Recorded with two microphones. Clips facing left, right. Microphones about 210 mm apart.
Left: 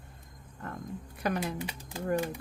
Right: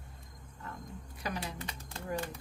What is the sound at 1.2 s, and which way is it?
Speech, 55° left (ahead or behind).